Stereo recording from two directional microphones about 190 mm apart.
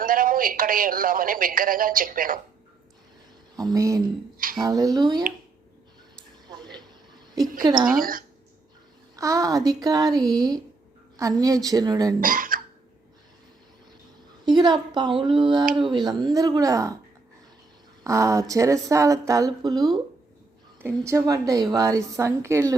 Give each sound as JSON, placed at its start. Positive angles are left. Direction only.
{"t": 0.0, "sound": "a woman's voice", "side_deg": -45}
{"t": 3.5, "sound": "speech", "side_deg": -20}
{"t": 7.6, "sound": "speech", "side_deg": -25}
{"t": 7.9, "sound": "a woman's voice", "side_deg": -50}
{"t": 9.1, "sound": "speech", "side_deg": -15}
{"t": 12.2, "sound": "speech", "side_deg": -45}
{"t": 14.4, "sound": "speech", "side_deg": -20}
{"t": 18.0, "sound": "speech", "side_deg": -15}